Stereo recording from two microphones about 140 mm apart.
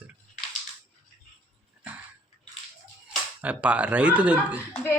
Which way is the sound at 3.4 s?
10° right (ahead or behind).